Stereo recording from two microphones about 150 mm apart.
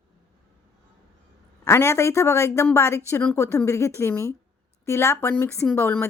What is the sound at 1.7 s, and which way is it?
A woman's voice, 20° left (ahead or behind).